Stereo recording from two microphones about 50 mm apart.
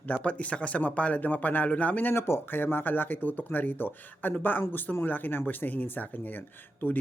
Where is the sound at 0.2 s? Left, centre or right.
Left.